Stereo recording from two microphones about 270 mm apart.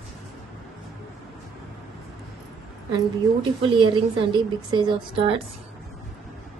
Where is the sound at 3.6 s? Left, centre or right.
Centre.